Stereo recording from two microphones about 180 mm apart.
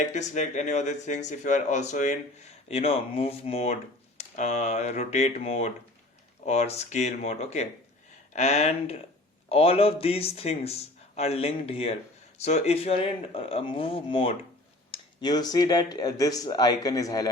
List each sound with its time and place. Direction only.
0.0 s speech: 40° left (ahead or behind); by 17.2 s 20° left (ahead or behind)